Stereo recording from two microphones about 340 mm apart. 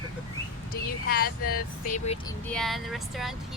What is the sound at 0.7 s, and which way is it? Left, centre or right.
Speech, left.